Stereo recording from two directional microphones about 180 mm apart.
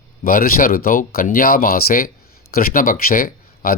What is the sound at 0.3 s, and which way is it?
Speech, 55° left (ahead or behind).